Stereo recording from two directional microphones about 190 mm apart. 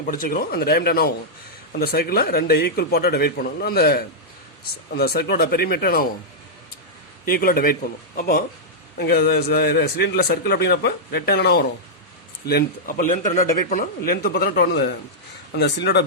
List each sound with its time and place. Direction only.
0.0 s a man's voice: 45° left (ahead or behind)
7.3 s speech: 50° left (ahead or behind)
9.0 s a man's voice: 55° left (ahead or behind)